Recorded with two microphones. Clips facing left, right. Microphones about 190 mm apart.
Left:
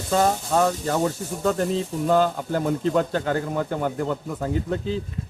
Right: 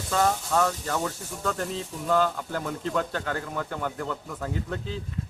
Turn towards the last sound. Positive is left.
turn(degrees=25)  # may be behind; listen again after turning